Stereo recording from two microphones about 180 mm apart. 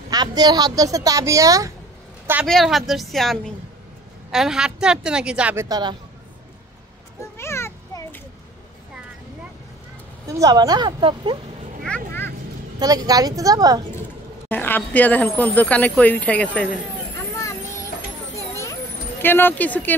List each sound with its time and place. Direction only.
0.1 s speech: 20° right (ahead or behind)
2.4 s a woman's voice: centre (ahead or behind)
5.7 s speech: 25° right (ahead or behind)
7.3 s a sound: 15° left (ahead or behind)
10.2 s speech: 20° right (ahead or behind)
12.7 s speech: 20° right (ahead or behind)
14.5 s speech: 10° left (ahead or behind)
17.4 s vehicle: 15° left (ahead or behind)
19.2 s speech: 10° left (ahead or behind)